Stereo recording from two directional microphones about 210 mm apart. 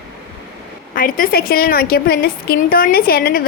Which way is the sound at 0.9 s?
40° left (ahead or behind).